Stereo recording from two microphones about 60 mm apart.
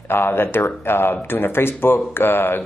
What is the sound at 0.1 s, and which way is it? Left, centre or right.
Speech, left.